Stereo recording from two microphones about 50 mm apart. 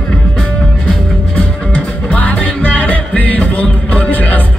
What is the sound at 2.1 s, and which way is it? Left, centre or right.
Music, left.